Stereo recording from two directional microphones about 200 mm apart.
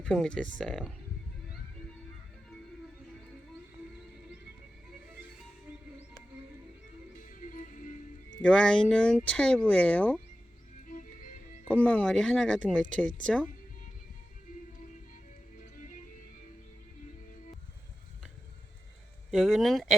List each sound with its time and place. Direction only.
0.0 s speech: 5° left (ahead or behind)
7.2 s music: 40° left (ahead or behind)
8.4 s speech: 5° left (ahead or behind)
10.8 s music: 40° left (ahead or behind)
11.7 s speech: 5° left (ahead or behind)
19.3 s speech: centre (ahead or behind)